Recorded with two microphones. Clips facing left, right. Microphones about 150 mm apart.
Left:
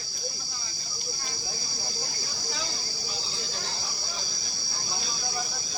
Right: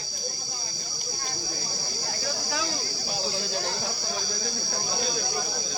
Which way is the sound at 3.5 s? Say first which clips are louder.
Right 7 dB; 55° right (ahead or behind).